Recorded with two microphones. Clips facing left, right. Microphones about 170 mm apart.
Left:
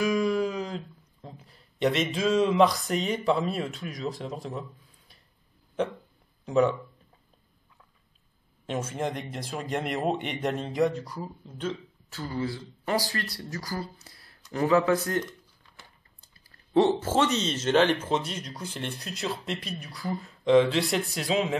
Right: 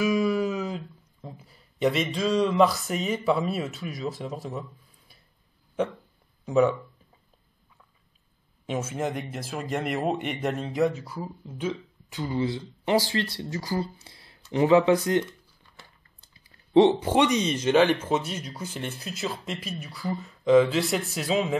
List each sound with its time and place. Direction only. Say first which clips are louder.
0.0 s a sound: right 1 dB; 5° right (ahead or behind)
6.4 s speech: right 2 dB; 5° right (ahead or behind)
8.6 s speech: right 1 dB; 5° right (ahead or behind); by 13.8 s 25° right (ahead or behind)
14.0 s a sound: right 2 dB; 25° right (ahead or behind)
14.5 s speech: right 4 dB; 20° right (ahead or behind)
16.4 s speech: right 4 dB; 15° right (ahead or behind); by 21.5 s centre (ahead or behind)